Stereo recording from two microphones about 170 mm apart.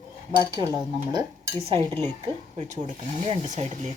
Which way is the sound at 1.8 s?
15° left (ahead or behind).